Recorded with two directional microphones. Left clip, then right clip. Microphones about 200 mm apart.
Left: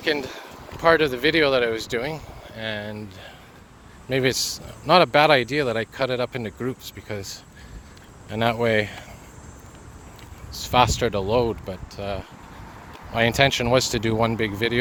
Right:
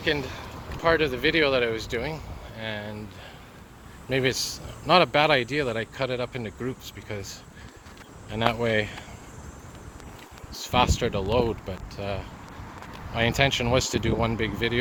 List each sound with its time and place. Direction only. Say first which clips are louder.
0.0 s speech: left 2 dB; 30° left (ahead or behind)
4.1 s speech: left 3 dB; 30° left (ahead or behind)
10.5 s speech: left 4 dB; 30° left (ahead or behind)
13.1 s speech: left 4 dB; 35° left (ahead or behind)